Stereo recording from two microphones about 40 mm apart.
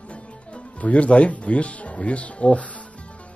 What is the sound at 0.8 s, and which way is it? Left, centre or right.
A man's voice, left.